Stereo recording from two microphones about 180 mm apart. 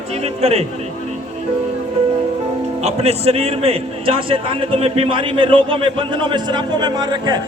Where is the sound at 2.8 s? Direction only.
35° right (ahead or behind).